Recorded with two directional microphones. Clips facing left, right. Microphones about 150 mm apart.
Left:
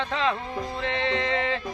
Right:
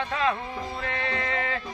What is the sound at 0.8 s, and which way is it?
Speech, 20° left (ahead or behind).